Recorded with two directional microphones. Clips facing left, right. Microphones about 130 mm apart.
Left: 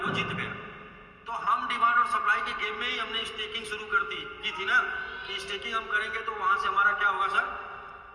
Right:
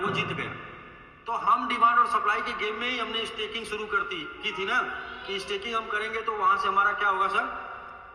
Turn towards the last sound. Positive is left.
turn(degrees=-30)  # may be behind; listen again after turning